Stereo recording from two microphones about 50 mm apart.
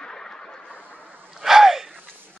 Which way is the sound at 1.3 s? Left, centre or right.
Centre.